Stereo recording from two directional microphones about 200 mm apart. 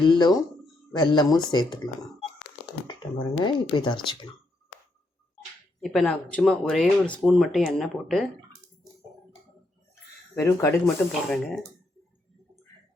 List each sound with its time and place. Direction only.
0.0 s speech: 20° left (ahead or behind)
3.4 s speech: 25° left (ahead or behind)
5.8 s speech: 5° left (ahead or behind)
9.9 s a sound: 15° left (ahead or behind)
11.3 s speech: centre (ahead or behind)